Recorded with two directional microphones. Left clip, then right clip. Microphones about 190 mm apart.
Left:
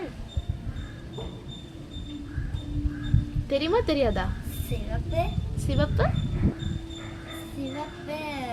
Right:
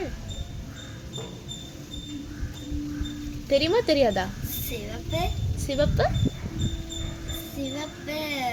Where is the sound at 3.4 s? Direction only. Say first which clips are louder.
Right 3 dB; 10° left (ahead or behind).